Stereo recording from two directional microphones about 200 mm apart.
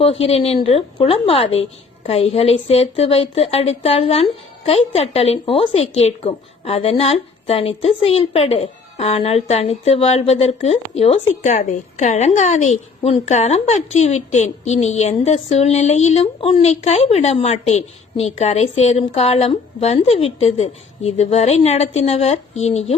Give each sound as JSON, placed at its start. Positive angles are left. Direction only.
{"t": 0.0, "sound": "a woman's voice", "side_deg": 30}